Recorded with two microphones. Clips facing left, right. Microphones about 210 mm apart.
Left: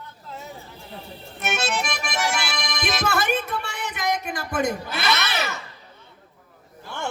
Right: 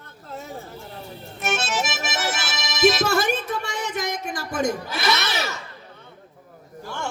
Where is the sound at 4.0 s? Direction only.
60° left (ahead or behind).